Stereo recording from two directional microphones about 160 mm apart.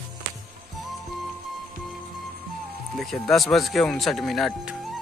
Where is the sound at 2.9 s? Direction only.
Centre (ahead or behind).